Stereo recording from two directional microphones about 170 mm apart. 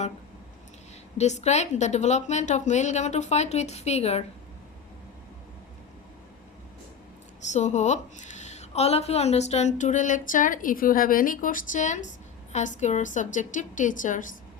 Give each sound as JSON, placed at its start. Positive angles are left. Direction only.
{"t": 1.2, "sound": "a woman's voice", "side_deg": 40}
{"t": 7.5, "sound": "a woman's voice", "side_deg": 45}